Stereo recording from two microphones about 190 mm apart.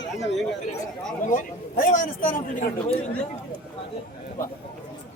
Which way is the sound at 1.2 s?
45° left (ahead or behind).